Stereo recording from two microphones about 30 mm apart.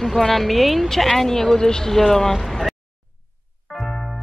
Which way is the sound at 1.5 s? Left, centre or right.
Left.